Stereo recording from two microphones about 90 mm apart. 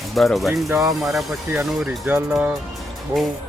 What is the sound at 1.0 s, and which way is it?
Speech, centre (ahead or behind).